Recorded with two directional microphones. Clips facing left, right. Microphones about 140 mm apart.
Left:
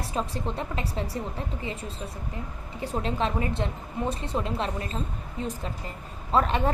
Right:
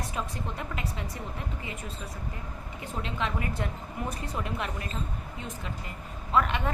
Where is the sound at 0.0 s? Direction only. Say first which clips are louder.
Left 4 dB; 30° left (ahead or behind).